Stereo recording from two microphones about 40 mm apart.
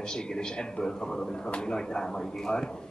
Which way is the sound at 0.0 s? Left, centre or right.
Centre.